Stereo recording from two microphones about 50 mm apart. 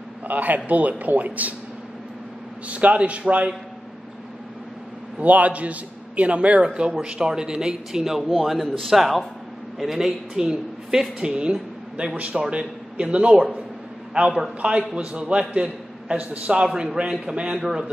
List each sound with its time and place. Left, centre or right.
0.3 s speech: right
2.7 s a man's voice: right
5.2 s a man's voice: right
16.6 s a woman's voice: centre